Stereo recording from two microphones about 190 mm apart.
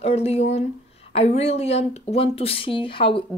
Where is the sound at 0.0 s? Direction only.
35° left (ahead or behind).